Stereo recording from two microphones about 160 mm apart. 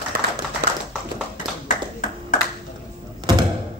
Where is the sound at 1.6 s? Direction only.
55° left (ahead or behind).